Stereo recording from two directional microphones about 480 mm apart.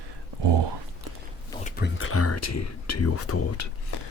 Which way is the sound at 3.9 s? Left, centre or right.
Left.